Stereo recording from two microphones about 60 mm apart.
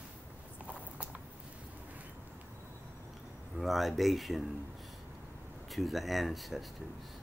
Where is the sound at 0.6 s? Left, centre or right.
Right.